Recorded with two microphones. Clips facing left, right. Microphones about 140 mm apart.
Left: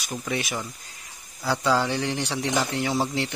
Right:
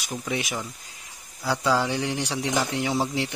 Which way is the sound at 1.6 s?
10° right (ahead or behind).